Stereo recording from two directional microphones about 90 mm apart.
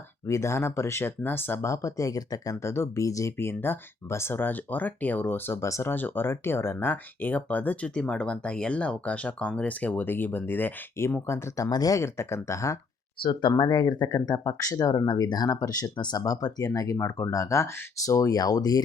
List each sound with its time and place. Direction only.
0.3 s speech: 35° left (ahead or behind)
5.9 s speech: 20° left (ahead or behind)
13.6 s speech: 55° left (ahead or behind)